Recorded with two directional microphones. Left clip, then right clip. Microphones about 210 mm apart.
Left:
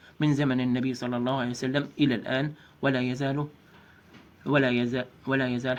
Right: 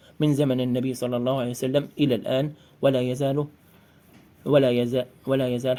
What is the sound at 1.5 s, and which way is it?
Speech, 55° right (ahead or behind).